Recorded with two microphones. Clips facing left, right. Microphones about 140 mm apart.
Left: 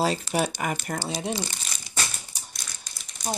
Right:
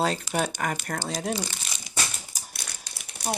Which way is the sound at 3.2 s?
70° right (ahead or behind).